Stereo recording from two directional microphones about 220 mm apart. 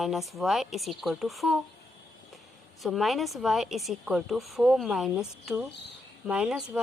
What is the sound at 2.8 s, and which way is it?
A woman's voice, centre (ahead or behind).